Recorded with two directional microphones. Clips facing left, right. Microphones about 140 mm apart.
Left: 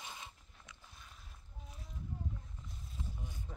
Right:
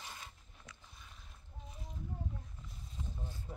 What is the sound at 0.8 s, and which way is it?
Boat, centre (ahead or behind).